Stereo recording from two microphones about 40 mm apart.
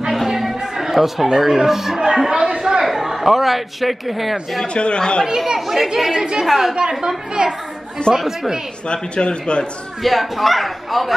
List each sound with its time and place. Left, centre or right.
0.1 s a sound: centre
0.7 s speech: centre
2.0 s chatter: centre
2.8 s a man's voice: centre
4.7 s a man's voice: left
5.2 s speech: centre
6.1 s a woman's voice: right
6.4 s speech: centre
6.7 s a woman's voice: centre
8.8 s a man's voice: left
10.0 s speech: centre